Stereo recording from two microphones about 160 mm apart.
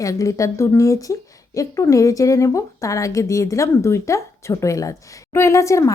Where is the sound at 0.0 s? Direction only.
20° left (ahead or behind).